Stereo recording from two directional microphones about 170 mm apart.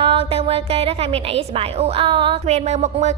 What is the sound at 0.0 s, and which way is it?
A woman's voice, 35° right (ahead or behind).